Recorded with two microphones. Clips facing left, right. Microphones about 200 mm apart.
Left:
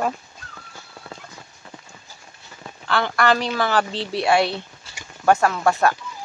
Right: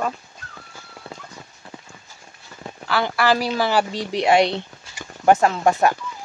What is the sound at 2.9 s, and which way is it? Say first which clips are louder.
Speech: even; 5° right (ahead or behind).